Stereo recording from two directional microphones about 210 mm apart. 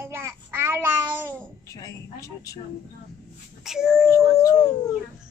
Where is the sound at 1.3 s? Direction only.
5° left (ahead or behind).